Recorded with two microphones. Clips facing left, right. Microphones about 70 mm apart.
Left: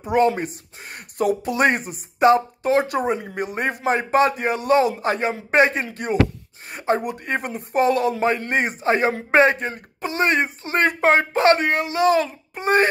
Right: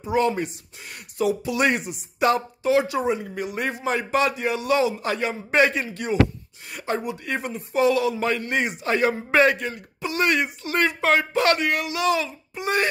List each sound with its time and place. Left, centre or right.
0.0 s a man's voice: left
6.7 s a sound: left
7.2 s a man's voice: left